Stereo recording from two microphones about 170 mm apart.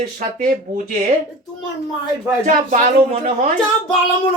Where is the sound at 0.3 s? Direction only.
50° right (ahead or behind).